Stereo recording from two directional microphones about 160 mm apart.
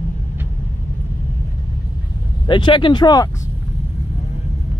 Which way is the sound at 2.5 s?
30° left (ahead or behind).